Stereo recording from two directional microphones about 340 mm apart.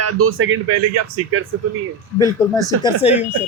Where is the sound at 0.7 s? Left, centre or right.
Right.